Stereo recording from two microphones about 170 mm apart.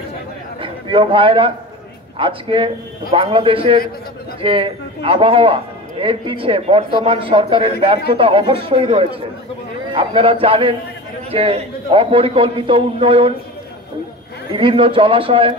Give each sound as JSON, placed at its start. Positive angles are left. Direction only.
{"t": 0.6, "sound": "a sound", "side_deg": -30}
{"t": 2.1, "sound": "a man's voice", "side_deg": -30}
{"t": 14.5, "sound": "a man's voice", "side_deg": -30}